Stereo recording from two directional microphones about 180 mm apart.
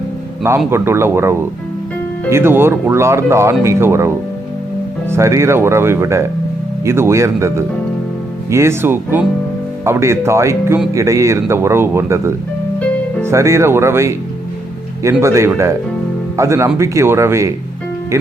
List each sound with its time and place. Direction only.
0.7 s speech: 15° right (ahead or behind)